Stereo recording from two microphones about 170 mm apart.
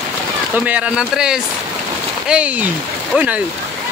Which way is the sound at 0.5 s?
10° right (ahead or behind).